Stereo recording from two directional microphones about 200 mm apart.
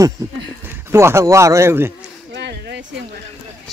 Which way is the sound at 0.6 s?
10° right (ahead or behind).